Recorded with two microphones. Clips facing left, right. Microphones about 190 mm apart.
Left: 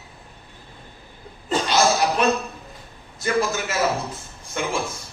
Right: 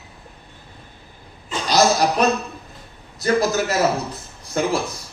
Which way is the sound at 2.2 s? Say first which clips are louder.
Right 2 dB; 40° right (ahead or behind).